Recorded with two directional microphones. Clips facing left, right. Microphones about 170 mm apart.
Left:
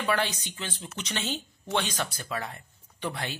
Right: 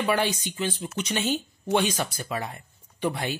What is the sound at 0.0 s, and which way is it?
A woman's voice, 10° right (ahead or behind).